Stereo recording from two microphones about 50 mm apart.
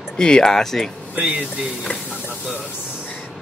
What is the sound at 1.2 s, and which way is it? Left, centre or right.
Speech, right.